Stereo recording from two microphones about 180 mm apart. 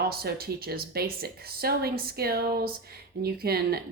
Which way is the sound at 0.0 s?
60° right (ahead or behind).